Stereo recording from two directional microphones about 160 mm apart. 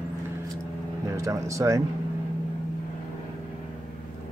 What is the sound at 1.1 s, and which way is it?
Speech, 20° right (ahead or behind).